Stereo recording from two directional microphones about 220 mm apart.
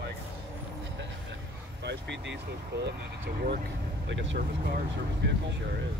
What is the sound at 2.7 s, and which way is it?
Speech, 50° right (ahead or behind).